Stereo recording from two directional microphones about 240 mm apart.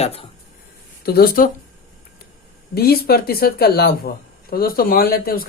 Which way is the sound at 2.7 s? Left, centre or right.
Left.